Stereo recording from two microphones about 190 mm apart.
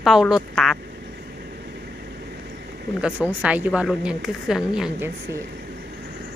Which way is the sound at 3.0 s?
10° right (ahead or behind).